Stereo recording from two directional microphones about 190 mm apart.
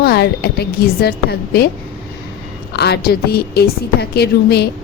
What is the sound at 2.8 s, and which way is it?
Speech, 60° left (ahead or behind).